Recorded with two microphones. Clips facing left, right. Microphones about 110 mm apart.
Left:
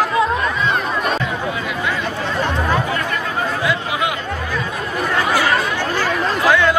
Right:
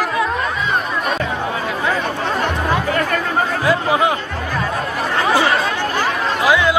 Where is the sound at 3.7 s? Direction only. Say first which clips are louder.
Right 5 dB; 35° right (ahead or behind).